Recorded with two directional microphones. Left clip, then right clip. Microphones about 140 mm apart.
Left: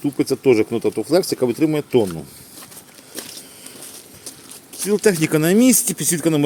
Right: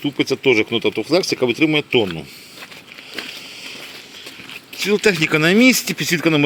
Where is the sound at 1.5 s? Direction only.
45° left (ahead or behind).